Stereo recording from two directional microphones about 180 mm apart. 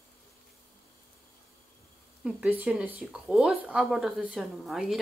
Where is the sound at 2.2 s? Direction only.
5° right (ahead or behind).